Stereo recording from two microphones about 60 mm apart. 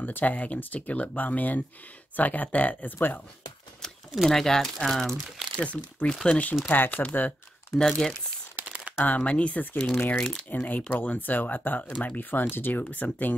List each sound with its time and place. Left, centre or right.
0.0 s speech: left
4.3 s speech: centre
5.6 s speech: left
7.7 s speech: centre
8.6 s a sound: centre
9.0 s speech: left